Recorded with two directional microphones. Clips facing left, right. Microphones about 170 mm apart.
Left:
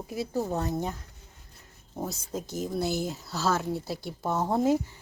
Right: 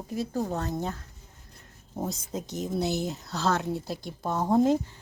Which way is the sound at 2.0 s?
Centre (ahead or behind).